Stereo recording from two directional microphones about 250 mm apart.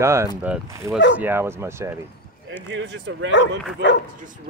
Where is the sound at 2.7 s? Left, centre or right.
Right.